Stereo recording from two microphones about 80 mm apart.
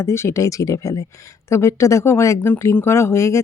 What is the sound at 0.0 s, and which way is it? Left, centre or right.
Speech, left.